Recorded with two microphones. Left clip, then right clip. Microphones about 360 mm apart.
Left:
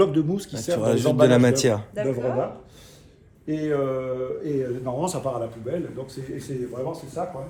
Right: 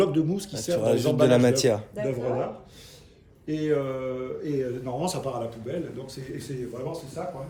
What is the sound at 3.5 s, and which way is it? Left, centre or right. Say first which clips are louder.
Mantra: left 2 dB; centre.